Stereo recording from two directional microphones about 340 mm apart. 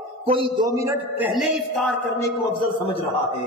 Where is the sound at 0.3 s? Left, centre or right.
Centre.